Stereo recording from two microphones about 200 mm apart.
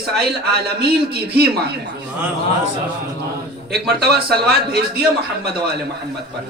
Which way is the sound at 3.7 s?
55° right (ahead or behind).